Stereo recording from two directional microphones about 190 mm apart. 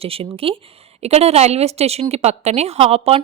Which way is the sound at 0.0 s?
30° right (ahead or behind).